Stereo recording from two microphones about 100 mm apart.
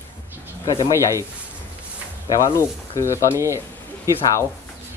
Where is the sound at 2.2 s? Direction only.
35° left (ahead or behind).